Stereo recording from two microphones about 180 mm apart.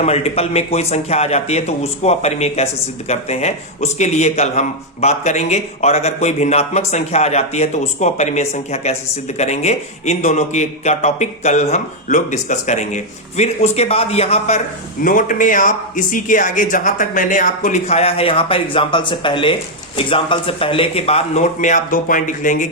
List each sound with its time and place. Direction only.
0.0 s a man's voice: 35° left (ahead or behind)
15.0 s a man's voice: 50° left (ahead or behind)